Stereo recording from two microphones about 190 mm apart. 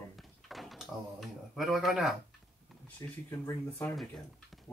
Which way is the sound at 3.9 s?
Centre (ahead or behind).